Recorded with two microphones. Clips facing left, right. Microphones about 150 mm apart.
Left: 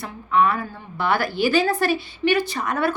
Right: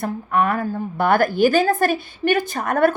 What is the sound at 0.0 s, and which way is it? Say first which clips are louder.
A woman's voice: even; 50° right (ahead or behind).